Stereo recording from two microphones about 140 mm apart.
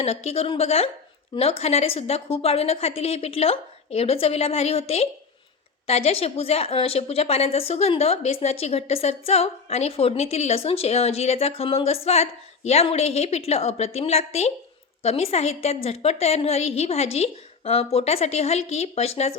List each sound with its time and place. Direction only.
0.0 s a woman's voice: 45° left (ahead or behind)